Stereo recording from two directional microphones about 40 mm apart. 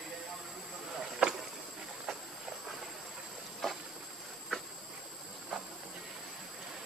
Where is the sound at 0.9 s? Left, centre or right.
Centre.